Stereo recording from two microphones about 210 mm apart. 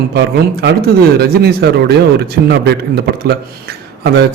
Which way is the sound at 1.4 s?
50° right (ahead or behind).